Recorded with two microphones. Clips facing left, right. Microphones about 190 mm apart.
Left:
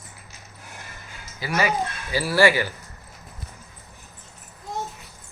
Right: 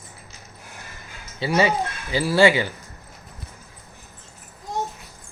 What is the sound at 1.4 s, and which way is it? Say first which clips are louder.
Speech: right 4 dB; 25° right (ahead or behind).